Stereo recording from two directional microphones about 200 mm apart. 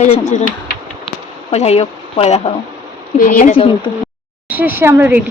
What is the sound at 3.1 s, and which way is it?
Speech, 45° left (ahead or behind).